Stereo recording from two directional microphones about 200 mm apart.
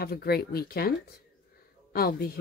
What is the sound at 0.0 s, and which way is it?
Speech, 50° left (ahead or behind).